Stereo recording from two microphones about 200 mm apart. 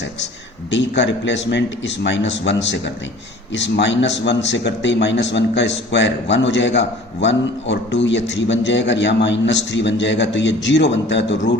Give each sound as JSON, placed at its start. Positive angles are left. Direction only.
{"t": 0.7, "sound": "a man's voice", "side_deg": 60}